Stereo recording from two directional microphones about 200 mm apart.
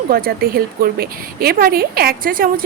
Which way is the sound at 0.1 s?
50° right (ahead or behind).